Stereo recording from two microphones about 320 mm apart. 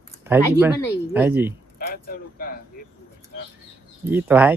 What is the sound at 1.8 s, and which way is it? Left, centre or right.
Speech, left.